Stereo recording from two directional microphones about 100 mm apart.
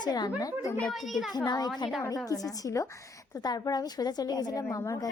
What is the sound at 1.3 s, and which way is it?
A child's voice, 40° left (ahead or behind).